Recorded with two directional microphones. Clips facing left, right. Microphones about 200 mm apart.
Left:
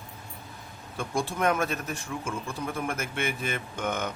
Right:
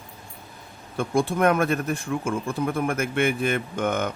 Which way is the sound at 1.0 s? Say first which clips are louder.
Right 7 dB; 55° right (ahead or behind).